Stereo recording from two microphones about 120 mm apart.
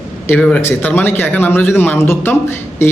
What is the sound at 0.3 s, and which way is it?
Speech, 10° left (ahead or behind).